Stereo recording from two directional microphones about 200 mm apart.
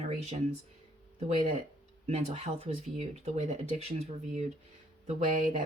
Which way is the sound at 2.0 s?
30° right (ahead or behind).